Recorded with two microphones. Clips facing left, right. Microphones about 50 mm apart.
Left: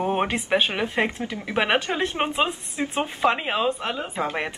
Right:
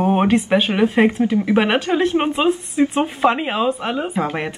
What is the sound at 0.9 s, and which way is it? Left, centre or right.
Speech, centre.